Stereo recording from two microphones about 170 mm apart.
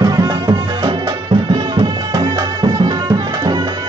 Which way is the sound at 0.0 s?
20° right (ahead or behind).